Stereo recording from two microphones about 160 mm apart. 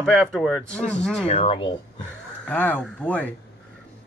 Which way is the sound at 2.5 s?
10° left (ahead or behind).